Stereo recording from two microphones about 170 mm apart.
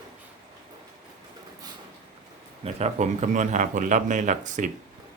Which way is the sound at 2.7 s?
40° right (ahead or behind).